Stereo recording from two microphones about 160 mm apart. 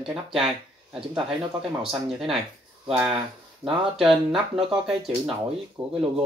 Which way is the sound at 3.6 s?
15° right (ahead or behind).